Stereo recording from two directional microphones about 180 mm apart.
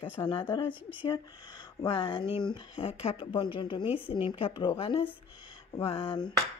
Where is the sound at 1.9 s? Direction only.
30° left (ahead or behind).